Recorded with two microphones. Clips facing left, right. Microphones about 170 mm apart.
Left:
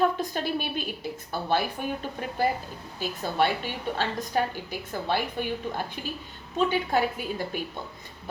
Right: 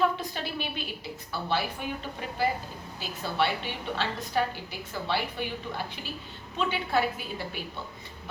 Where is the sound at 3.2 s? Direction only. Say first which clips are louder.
Left 2 dB; 45° left (ahead or behind).